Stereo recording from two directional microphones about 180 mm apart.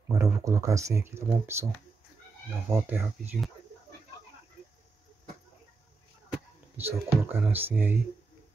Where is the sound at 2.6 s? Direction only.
10° right (ahead or behind).